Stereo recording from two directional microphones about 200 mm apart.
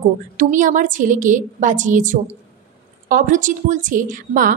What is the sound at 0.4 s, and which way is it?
A woman's voice, 40° right (ahead or behind).